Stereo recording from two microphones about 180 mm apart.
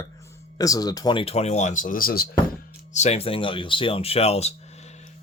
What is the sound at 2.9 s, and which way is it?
Speech, 40° left (ahead or behind).